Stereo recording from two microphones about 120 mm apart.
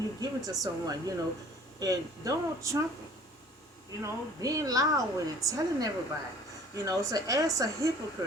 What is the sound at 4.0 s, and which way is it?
A woman's voice, 30° right (ahead or behind).